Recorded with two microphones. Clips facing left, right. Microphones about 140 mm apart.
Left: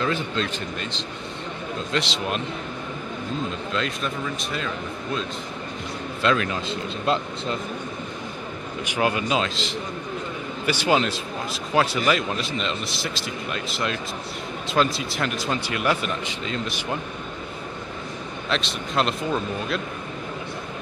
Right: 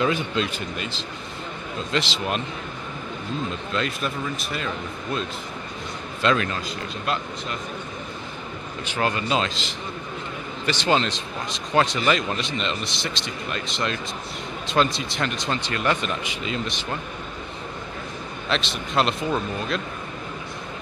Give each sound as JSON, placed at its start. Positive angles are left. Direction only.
{"t": 0.0, "sound": "a man's voice", "side_deg": -15}
{"t": 3.7, "sound": "a man's voice", "side_deg": -5}
{"t": 6.2, "sound": "a man's voice", "side_deg": 0}
{"t": 6.7, "sound": "speech", "side_deg": 25}
{"t": 8.8, "sound": "a man's voice", "side_deg": 10}
{"t": 18.5, "sound": "a man's voice", "side_deg": 0}